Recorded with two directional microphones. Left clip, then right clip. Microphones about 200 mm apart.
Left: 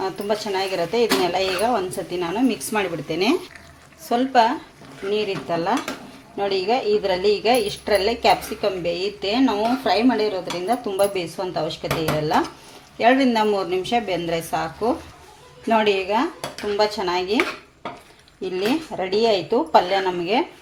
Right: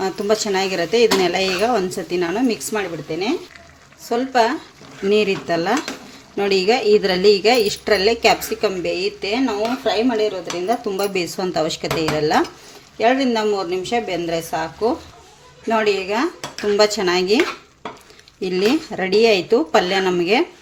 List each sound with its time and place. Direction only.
0.0 s a woman's voice: 25° right (ahead or behind)
2.6 s speech: 10° right (ahead or behind)
3.1 s speech: 15° left (ahead or behind)
4.1 s speech: 5° right (ahead or behind)
5.1 s stir: 30° right (ahead or behind)
6.3 s a woman's voice: 30° right (ahead or behind)
13.0 s a woman's voice: 5° right (ahead or behind)
16.7 s a woman's voice: 30° right (ahead or behind)
18.4 s a woman's voice: 25° right (ahead or behind)